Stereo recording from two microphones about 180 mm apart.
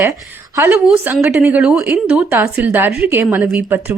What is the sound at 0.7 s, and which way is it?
A woman's voice, 5° right (ahead or behind).